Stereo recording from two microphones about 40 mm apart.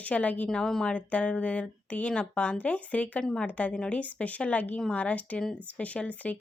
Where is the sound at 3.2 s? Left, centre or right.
Centre.